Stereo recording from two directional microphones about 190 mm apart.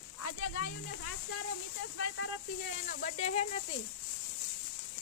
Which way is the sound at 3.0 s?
35° left (ahead or behind).